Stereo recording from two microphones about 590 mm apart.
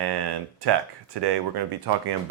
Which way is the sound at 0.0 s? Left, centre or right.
Right.